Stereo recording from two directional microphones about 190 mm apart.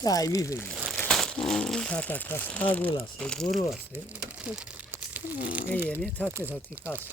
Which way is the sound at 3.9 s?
10° right (ahead or behind).